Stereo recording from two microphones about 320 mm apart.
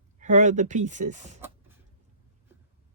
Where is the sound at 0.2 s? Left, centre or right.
Right.